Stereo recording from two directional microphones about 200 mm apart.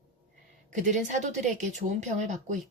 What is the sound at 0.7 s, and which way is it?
A woman's voice, 40° right (ahead or behind).